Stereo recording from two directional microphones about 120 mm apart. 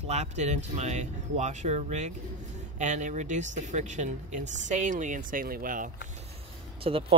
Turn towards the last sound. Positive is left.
turn(degrees=-55)  # may be behind; listen again after turning